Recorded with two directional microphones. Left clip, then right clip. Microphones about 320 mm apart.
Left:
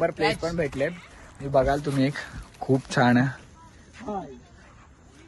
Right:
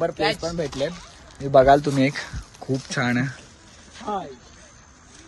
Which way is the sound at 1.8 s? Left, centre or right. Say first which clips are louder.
Right 5 dB; centre.